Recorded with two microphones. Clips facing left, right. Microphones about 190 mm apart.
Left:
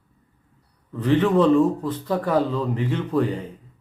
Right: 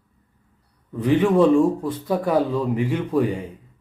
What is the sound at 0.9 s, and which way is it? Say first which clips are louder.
Speech: right 1 dB; 10° right (ahead or behind).